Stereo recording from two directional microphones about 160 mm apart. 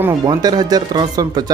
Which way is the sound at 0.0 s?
20° right (ahead or behind).